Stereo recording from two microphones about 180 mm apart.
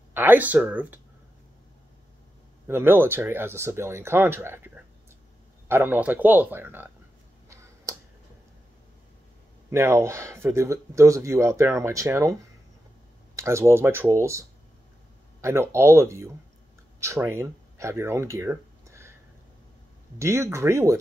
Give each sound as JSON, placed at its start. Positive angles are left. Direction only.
{"t": 0.1, "sound": "speech", "side_deg": -10}
{"t": 2.7, "sound": "speech", "side_deg": -10}
{"t": 9.7, "sound": "speech", "side_deg": -15}
{"t": 13.4, "sound": "speech", "side_deg": -15}
{"t": 15.4, "sound": "speech", "side_deg": -15}
{"t": 20.2, "sound": "speech", "side_deg": -15}